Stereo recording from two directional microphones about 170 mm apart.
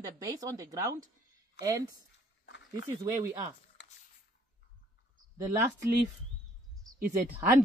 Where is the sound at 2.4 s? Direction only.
90° left.